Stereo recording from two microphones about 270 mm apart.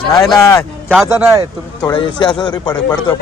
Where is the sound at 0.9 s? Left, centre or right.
Centre.